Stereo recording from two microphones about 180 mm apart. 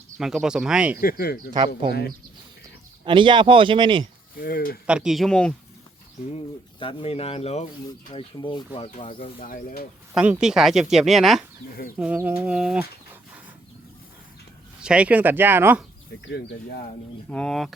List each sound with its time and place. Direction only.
0.2 s speech: 5° right (ahead or behind)
1.0 s speech: 55° left (ahead or behind)
1.5 s speech: 25° right (ahead or behind)
3.0 s speech: 25° right (ahead or behind)
4.4 s speech: 55° left (ahead or behind)
4.9 s speech: 5° right (ahead or behind)
6.3 s speech: 30° left (ahead or behind)
8.1 s speech: 25° left (ahead or behind)
9.1 s speech: 50° left (ahead or behind)
10.2 s speech: 5° right (ahead or behind)
14.8 s speech: 5° right (ahead or behind)
16.2 s speech: 65° left (ahead or behind)
17.2 s speech: 5° left (ahead or behind)